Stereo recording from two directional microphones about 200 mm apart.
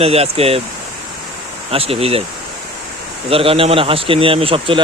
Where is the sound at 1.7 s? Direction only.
30° right (ahead or behind).